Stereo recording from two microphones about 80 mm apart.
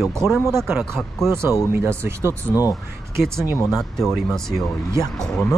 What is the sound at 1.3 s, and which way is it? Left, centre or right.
Speech, right.